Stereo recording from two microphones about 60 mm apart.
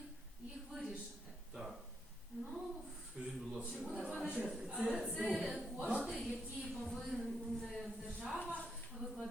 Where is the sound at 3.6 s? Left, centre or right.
Right; by 8.4 s centre.